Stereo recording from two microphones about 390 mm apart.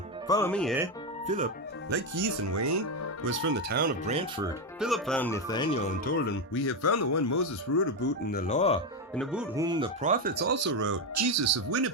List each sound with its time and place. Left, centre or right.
0.3 s speech: centre
2.1 s speech: right
3.2 s speech: right
4.8 s speech: centre
6.2 s speech: left
8.0 s speech: left
9.1 s speech: centre; by 10.9 s right
11.1 s speech: right